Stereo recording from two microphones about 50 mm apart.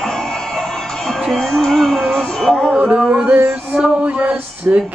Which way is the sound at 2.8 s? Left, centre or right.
Right.